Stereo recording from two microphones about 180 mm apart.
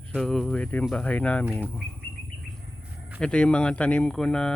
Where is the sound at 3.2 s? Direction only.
5° left (ahead or behind).